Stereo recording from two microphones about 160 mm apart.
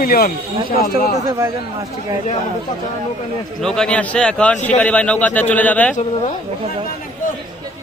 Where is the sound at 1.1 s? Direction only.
20° right (ahead or behind).